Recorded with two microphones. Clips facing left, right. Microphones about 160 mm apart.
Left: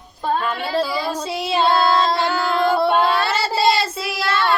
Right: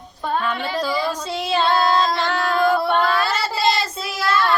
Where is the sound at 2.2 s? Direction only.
5° left (ahead or behind).